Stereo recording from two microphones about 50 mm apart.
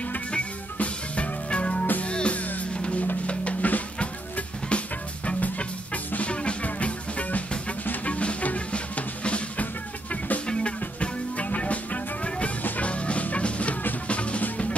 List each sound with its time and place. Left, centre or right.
0.3 s music: left